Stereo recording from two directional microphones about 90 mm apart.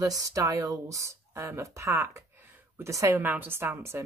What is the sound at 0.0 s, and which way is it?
A woman's voice, 40° right (ahead or behind).